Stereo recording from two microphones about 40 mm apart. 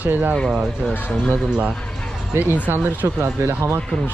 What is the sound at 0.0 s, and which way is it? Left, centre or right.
Speech, right.